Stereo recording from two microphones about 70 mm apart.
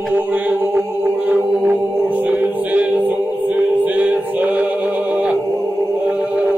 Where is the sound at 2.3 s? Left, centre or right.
Right.